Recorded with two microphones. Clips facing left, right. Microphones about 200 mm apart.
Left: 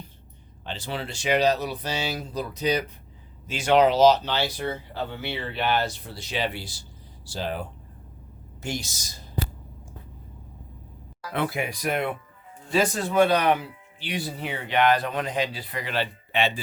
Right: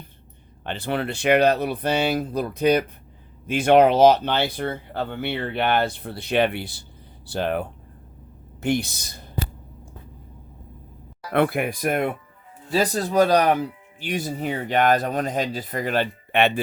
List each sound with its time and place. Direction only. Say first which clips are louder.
0.6 s speech: right 7 dB; 60° right (ahead or behind)
11.3 s speech: right 7 dB; 60° right (ahead or behind)
12.7 s speech: right 2 dB; 35° right (ahead or behind); by 16.5 s 55° right (ahead or behind)